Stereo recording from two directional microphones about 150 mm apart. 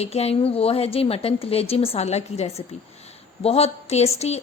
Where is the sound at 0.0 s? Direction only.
45° left (ahead or behind).